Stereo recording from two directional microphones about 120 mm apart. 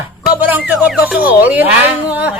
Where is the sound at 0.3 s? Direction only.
15° right (ahead or behind).